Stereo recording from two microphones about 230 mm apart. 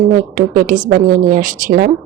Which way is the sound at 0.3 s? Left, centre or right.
Right.